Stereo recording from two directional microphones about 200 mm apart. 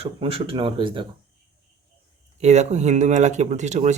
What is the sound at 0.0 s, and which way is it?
Speech, 30° right (ahead or behind).